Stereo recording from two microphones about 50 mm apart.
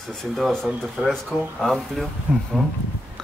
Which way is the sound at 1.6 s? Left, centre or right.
Centre.